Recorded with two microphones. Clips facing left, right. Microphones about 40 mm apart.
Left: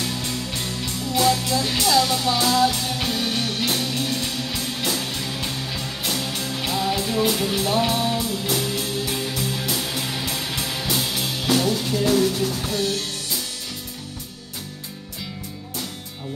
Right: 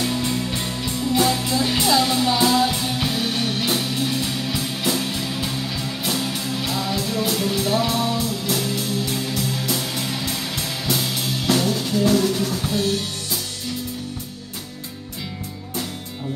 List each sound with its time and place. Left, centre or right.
0.0 s music: centre